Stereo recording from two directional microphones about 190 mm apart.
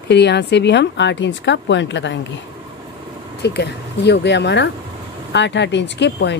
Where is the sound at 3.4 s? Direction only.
65° left (ahead or behind).